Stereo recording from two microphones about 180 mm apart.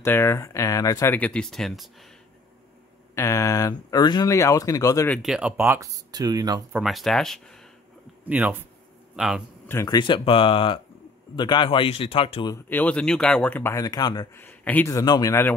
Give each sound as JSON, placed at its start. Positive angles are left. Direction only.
{"t": 0.0, "sound": "speech", "side_deg": 15}
{"t": 3.2, "sound": "speech", "side_deg": 15}
{"t": 5.0, "sound": "speech", "side_deg": 0}
{"t": 6.7, "sound": "speech", "side_deg": 0}
{"t": 8.3, "sound": "a man's voice", "side_deg": -10}
{"t": 9.7, "sound": "speech", "side_deg": 20}
{"t": 12.5, "sound": "speech", "side_deg": 10}
{"t": 14.4, "sound": "speech", "side_deg": 10}